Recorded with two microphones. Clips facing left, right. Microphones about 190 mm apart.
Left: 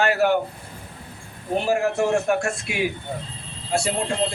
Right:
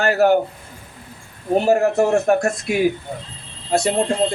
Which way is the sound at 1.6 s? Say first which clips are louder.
Right 5 dB; 40° right (ahead or behind).